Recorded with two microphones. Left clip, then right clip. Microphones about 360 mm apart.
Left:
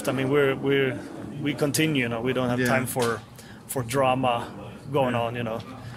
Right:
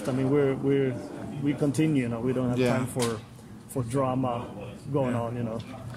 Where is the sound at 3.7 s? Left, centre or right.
Left.